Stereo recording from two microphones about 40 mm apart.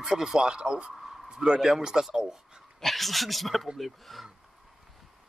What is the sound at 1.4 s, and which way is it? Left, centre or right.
Speech, centre.